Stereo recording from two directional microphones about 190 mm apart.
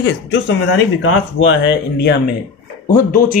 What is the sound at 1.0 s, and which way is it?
Speech, 90° left.